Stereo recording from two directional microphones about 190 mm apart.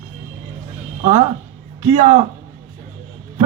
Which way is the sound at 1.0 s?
40° right (ahead or behind).